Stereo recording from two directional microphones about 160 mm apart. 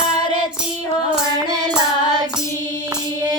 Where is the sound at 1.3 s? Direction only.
25° right (ahead or behind).